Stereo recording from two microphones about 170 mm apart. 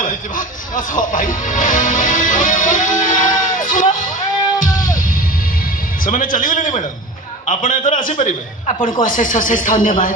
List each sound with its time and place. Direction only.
0.0 s speech: 50° left (ahead or behind)
3.0 s music: 50° left (ahead or behind)
6.1 s a man's voice: 50° left (ahead or behind)